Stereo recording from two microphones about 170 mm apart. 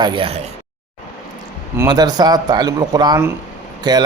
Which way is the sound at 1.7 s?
25° right (ahead or behind).